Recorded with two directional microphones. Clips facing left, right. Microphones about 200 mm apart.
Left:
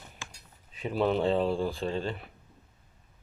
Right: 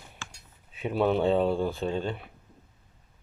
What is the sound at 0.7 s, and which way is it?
Speech, 5° right (ahead or behind).